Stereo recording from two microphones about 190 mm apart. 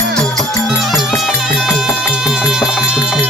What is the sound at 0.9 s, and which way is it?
Music, centre (ahead or behind).